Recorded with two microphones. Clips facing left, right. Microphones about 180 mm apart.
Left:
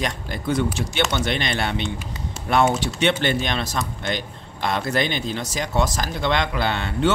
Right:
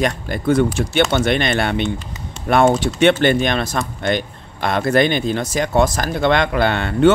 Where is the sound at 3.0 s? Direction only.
55° right (ahead or behind).